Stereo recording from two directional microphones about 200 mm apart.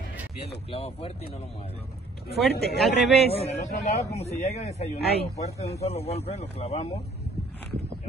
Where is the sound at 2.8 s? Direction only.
Centre (ahead or behind).